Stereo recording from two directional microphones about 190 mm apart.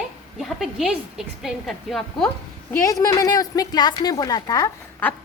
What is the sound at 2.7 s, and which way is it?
A woman's voice, 15° left (ahead or behind).